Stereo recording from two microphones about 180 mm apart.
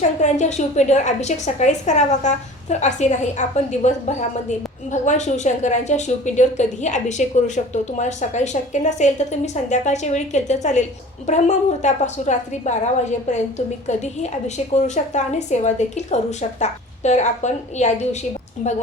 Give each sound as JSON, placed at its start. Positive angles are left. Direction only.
{"t": 0.2, "sound": "a woman's voice", "side_deg": 40}